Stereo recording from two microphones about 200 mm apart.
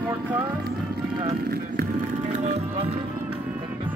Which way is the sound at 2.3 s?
35° right (ahead or behind).